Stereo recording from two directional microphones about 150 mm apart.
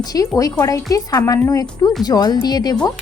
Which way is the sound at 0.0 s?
25° left (ahead or behind).